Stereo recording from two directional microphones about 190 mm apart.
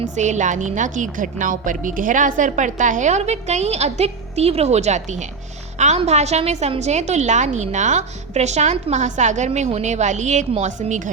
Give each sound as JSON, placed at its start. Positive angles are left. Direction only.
{"t": 0.0, "sound": "a woman's voice", "side_deg": -40}